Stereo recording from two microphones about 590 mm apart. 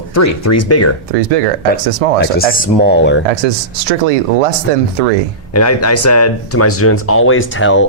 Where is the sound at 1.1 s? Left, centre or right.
Right.